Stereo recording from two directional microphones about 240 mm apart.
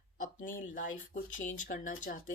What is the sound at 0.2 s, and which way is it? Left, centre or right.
Speech, left.